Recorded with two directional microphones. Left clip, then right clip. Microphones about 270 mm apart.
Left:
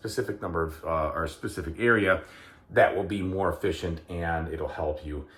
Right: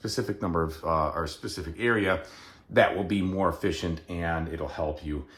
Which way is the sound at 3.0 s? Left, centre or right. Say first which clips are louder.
Right 1 dB; right.